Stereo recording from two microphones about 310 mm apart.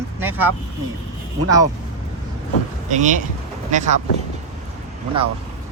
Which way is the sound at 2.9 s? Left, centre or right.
Right.